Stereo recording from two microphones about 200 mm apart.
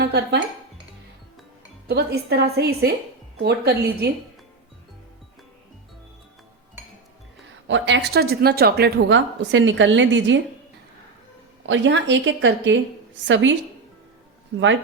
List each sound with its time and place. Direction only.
0.0 s dishes: 55° right (ahead or behind)
1.9 s a woman's voice: 55° right (ahead or behind)
7.7 s a woman's voice: 65° right (ahead or behind)
11.6 s a woman's voice: 65° right (ahead or behind)